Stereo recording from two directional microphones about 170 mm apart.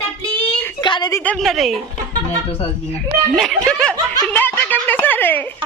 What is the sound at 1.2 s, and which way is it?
Speech, centre (ahead or behind).